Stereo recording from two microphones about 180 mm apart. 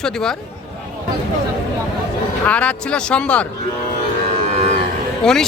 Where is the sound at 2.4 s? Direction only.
5° left (ahead or behind).